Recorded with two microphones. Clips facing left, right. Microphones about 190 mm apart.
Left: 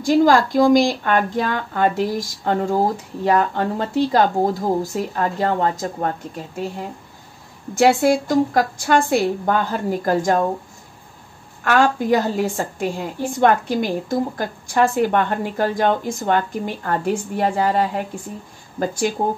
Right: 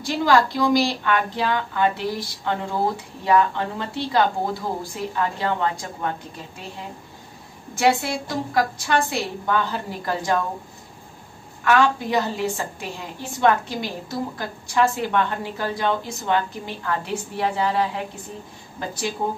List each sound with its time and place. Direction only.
0.0 s speech: 45° left (ahead or behind)
8.0 s speech: 45° left (ahead or behind)
11.6 s speech: 45° left (ahead or behind)